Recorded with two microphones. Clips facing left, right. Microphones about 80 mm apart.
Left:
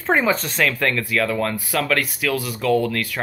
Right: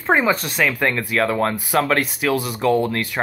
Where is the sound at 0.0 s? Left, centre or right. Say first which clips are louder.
Right 1 dB; centre.